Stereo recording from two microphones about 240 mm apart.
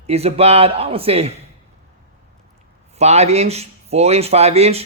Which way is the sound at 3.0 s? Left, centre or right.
Right.